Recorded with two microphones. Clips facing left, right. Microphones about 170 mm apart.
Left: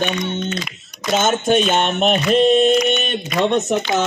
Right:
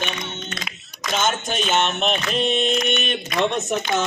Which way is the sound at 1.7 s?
40° left (ahead or behind).